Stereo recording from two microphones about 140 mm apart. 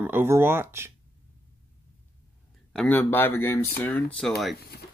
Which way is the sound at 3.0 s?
15° left (ahead or behind).